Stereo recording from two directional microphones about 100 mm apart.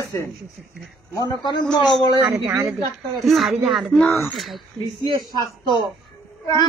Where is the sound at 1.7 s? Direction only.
5° left (ahead or behind).